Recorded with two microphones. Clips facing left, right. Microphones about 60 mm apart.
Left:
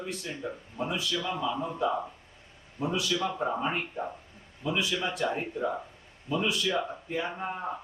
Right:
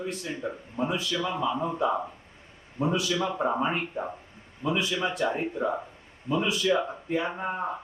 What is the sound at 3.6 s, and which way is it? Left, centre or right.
Speech, centre.